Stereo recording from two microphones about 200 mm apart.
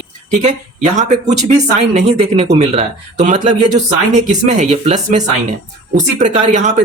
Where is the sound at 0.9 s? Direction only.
35° right (ahead or behind).